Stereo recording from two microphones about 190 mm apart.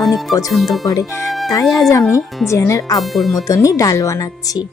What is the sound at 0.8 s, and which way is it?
Speech, 15° left (ahead or behind).